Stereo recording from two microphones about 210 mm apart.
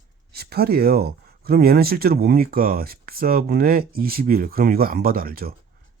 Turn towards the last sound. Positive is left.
turn(degrees=-45)  # may be behind; listen again after turning